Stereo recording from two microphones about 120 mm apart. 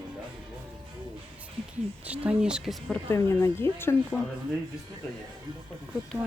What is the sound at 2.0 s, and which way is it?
Speech, 10° right (ahead or behind).